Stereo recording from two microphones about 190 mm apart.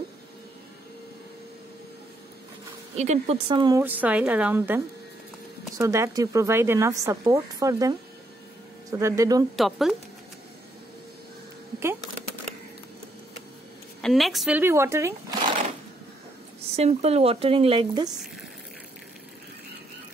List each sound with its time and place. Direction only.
3.0 s speech: 35° right (ahead or behind)
3.8 s speech: 10° right (ahead or behind)
8.9 s speech: 15° right (ahead or behind)
9.6 s a woman's voice: centre (ahead or behind)
14.0 s a woman's voice: centre (ahead or behind)
14.6 s speech: 15° right (ahead or behind)
16.7 s speech: 35° right (ahead or behind)